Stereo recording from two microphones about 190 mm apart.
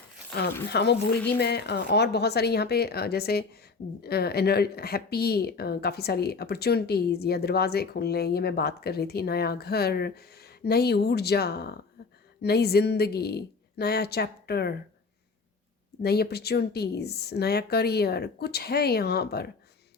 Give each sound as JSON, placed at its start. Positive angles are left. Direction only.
{"t": 0.7, "sound": "speech", "side_deg": 60}
{"t": 16.0, "sound": "speech", "side_deg": 55}